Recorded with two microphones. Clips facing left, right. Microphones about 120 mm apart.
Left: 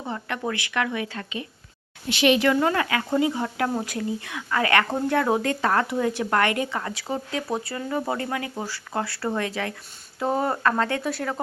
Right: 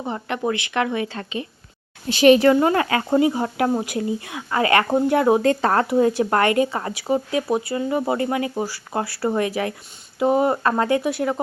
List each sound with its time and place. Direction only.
0.0 s speech: 20° right (ahead or behind)
2.0 s a woman's voice: 40° right (ahead or behind)
2.6 s speech: 30° right (ahead or behind)
10.2 s speech: 10° right (ahead or behind)